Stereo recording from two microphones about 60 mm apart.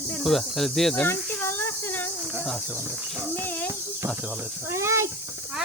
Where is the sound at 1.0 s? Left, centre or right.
Left.